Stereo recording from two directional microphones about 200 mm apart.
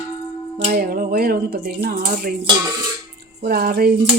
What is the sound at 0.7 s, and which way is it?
Speech, 45° right (ahead or behind).